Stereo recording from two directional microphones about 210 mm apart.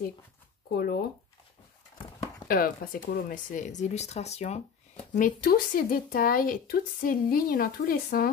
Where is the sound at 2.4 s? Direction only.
45° left (ahead or behind).